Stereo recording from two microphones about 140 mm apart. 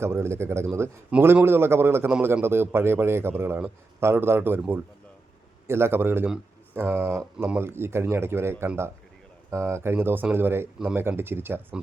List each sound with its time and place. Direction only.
0.0 s speech: 20° right (ahead or behind)